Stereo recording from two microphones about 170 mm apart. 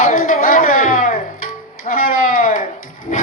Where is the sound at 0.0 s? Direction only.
50° left (ahead or behind).